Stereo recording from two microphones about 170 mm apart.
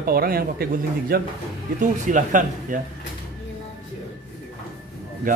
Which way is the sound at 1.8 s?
50° right (ahead or behind).